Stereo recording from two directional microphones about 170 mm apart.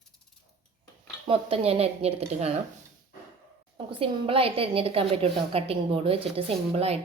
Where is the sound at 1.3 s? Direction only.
35° right (ahead or behind).